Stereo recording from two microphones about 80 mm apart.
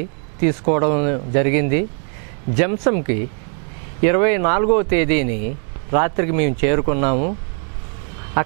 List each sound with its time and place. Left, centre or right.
0.4 s speech: right